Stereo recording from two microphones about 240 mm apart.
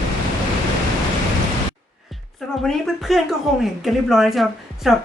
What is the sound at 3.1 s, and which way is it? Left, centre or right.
A woman's voice, centre.